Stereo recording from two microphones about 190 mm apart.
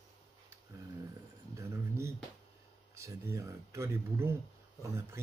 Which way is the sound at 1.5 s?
15° right (ahead or behind).